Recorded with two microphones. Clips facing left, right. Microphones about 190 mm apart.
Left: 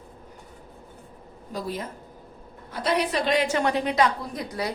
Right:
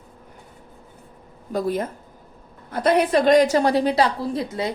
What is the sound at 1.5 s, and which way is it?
A woman's voice, 50° right (ahead or behind).